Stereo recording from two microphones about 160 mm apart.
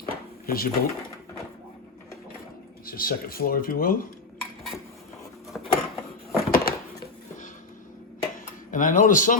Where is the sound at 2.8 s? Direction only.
65° left (ahead or behind).